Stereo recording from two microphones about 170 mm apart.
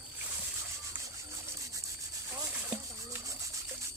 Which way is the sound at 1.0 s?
15° right (ahead or behind).